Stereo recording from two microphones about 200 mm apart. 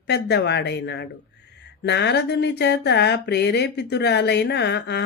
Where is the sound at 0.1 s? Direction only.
55° left (ahead or behind).